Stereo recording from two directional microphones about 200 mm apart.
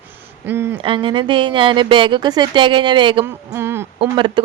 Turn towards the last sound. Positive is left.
turn(degrees=-25)  # may be behind; listen again after turning